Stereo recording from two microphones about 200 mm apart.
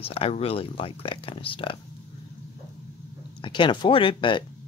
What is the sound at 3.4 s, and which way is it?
Speech, 25° left (ahead or behind).